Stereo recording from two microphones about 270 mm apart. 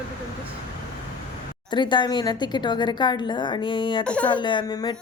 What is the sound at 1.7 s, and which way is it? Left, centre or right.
A woman's voice, centre.